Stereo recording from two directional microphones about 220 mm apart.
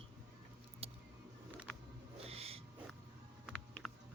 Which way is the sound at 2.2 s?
25° right (ahead or behind).